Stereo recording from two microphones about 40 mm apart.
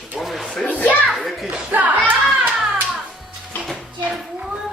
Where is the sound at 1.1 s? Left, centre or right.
Centre.